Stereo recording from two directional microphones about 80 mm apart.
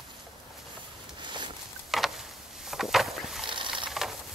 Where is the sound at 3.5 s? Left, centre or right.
Right.